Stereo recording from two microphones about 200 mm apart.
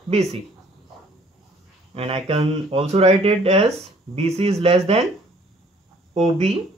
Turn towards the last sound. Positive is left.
turn(degrees=-30)  # may be behind; listen again after turning